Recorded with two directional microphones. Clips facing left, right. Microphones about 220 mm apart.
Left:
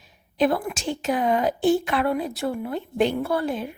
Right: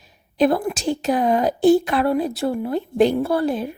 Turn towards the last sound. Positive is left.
turn(degrees=-35)  # may be behind; listen again after turning